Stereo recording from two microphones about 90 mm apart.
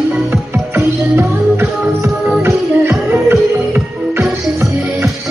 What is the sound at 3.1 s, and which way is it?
Music, 25° right (ahead or behind).